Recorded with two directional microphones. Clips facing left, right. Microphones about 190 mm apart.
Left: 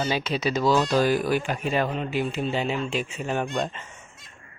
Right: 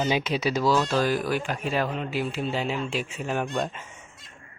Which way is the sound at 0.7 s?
10° left (ahead or behind).